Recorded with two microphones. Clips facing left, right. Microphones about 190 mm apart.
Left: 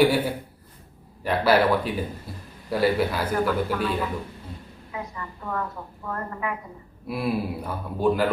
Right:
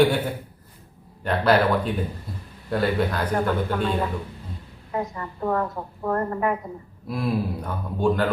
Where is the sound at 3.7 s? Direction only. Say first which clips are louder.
Right 2 dB; 35° right (ahead or behind).